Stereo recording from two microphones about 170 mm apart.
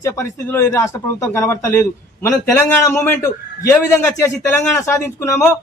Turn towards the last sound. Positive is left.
turn(degrees=10)  # may be behind; listen again after turning